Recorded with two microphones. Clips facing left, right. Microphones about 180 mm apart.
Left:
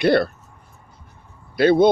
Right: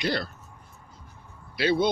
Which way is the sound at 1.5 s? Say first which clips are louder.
Left 9 dB; 50° left (ahead or behind).